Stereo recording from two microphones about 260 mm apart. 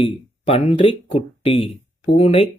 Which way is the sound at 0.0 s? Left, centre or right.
Left.